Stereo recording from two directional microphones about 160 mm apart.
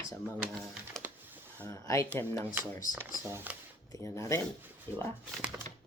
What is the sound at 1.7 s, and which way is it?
Speech, 20° left (ahead or behind).